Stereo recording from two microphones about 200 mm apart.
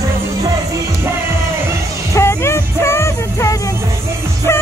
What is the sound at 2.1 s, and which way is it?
Music, 15° left (ahead or behind).